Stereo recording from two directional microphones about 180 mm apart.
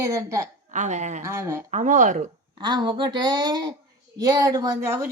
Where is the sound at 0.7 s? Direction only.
40° right (ahead or behind).